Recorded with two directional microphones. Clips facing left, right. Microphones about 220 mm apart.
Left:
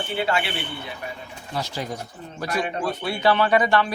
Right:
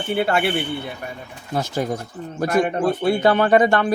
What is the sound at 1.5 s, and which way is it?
Speech, 50° right (ahead or behind).